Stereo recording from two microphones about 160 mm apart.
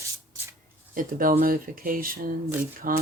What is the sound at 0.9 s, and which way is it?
Speech, 60° right (ahead or behind).